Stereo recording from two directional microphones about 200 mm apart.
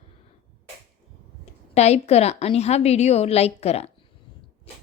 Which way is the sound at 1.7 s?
35° left (ahead or behind).